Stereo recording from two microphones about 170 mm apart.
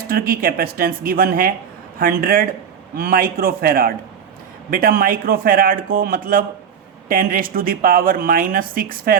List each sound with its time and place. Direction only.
0.1 s speech: 60° right (ahead or behind)